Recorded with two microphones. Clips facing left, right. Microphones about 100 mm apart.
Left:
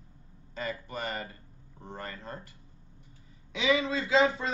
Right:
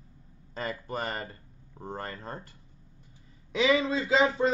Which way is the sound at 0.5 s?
35° right (ahead or behind).